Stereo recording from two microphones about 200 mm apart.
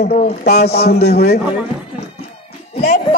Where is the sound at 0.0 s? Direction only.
50° left (ahead or behind).